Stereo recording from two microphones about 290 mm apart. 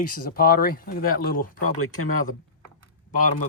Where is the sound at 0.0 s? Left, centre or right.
Left.